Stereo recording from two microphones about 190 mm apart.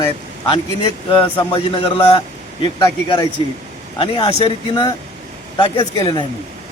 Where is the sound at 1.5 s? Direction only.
30° left (ahead or behind).